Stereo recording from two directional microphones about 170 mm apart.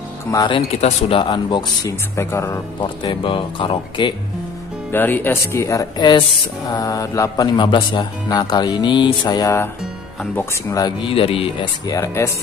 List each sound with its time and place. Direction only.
0.3 s speech: 20° left (ahead or behind)
0.7 s speech: 35° left (ahead or behind); by 2.9 s 15° left (ahead or behind)
3.0 s speech: 30° left (ahead or behind)
4.9 s speech: 10° left (ahead or behind); by 11.6 s 35° left (ahead or behind)
11.9 s speech: 15° left (ahead or behind)